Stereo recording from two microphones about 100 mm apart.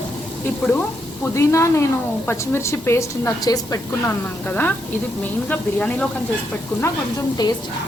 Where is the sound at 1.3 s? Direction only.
30° left (ahead or behind).